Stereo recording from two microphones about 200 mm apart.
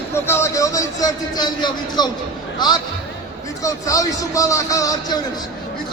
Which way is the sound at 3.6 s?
15° left (ahead or behind).